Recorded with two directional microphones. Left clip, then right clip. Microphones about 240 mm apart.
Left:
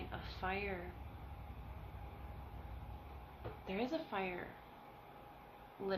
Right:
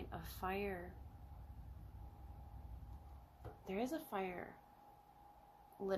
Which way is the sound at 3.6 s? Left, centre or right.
Right.